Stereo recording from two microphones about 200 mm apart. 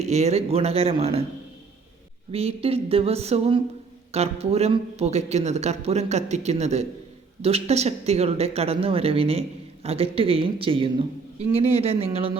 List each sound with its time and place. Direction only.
0.0 s speech: 35° right (ahead or behind)
2.3 s a man's voice: 30° right (ahead or behind)